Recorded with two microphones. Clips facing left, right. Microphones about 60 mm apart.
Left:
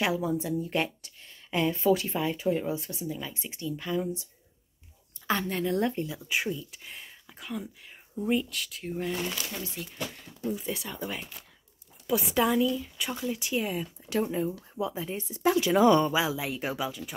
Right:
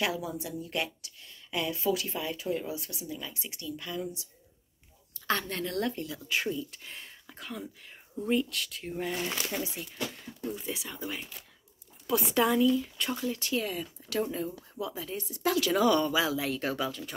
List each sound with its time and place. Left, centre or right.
0.0 s speech: left
5.2 s speech: centre
6.5 s speech: centre
9.3 s speech: centre
10.4 s a woman's voice: centre; by 16.3 s left
16.3 s a woman's voice: centre